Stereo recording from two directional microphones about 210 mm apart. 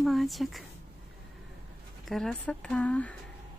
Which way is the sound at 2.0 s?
Centre (ahead or behind).